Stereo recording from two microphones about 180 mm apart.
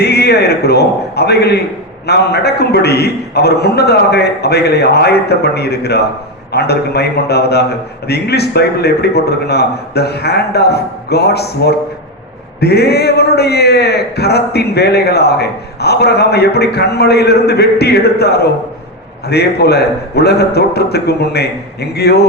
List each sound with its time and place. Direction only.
0.0 s a man's voice: 65° left (ahead or behind)